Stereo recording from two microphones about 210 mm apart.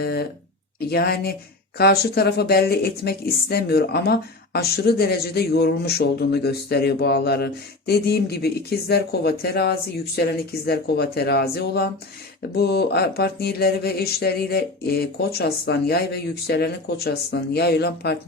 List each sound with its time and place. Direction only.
0.0 s speech: 50° left (ahead or behind)